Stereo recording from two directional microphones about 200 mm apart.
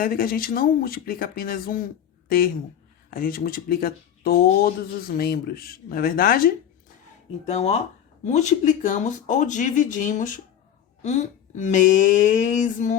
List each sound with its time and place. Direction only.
0.0 s speech: 45° left (ahead or behind)
3.1 s speech: 45° left (ahead or behind)
7.4 s speech: 35° left (ahead or behind)